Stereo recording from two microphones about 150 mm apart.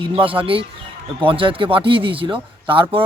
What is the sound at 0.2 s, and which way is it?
Speech, 35° right (ahead or behind).